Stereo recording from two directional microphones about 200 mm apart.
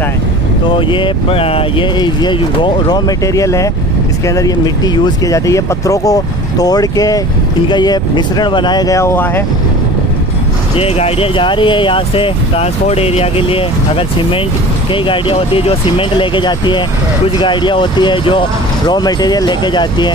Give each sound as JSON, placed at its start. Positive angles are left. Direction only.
{"t": 0.7, "sound": "speech", "side_deg": 25}
{"t": 10.8, "sound": "speech", "side_deg": 30}